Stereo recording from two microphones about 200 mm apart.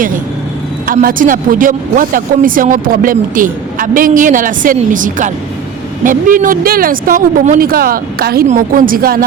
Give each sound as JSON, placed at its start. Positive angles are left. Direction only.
{"t": 0.9, "sound": "speech", "side_deg": -45}